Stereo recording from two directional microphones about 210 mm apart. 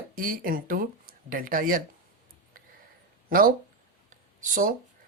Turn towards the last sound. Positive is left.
turn(degrees=-40)  # may be behind; listen again after turning